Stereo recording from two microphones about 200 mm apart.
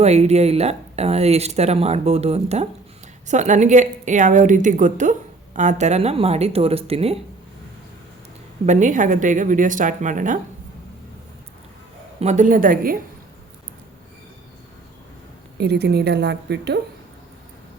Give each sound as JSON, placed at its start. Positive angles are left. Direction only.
{"t": 0.0, "sound": "speech", "side_deg": -35}
{"t": 8.6, "sound": "speech", "side_deg": -35}
{"t": 12.2, "sound": "a woman's voice", "side_deg": -35}
{"t": 15.5, "sound": "a woman's voice", "side_deg": -55}